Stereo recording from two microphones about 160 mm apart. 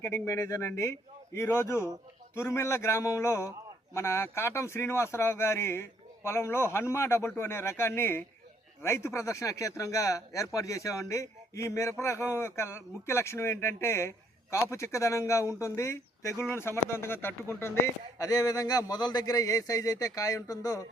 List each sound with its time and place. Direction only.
0.0 s speech: 15° left (ahead or behind)